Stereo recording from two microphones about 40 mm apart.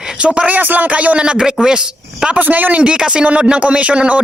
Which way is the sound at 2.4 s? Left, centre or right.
Right.